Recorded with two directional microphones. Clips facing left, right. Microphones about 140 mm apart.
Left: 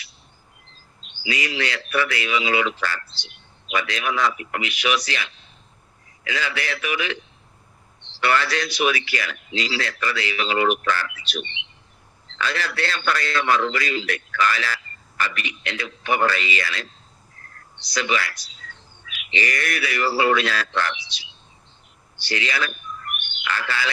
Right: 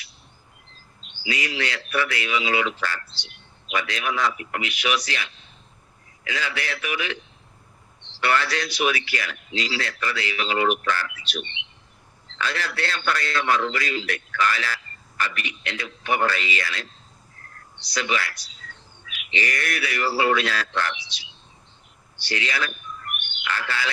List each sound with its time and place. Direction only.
1.1 s a man's voice: 90° left
8.2 s a man's voice: 90° left
22.2 s a man's voice: 90° left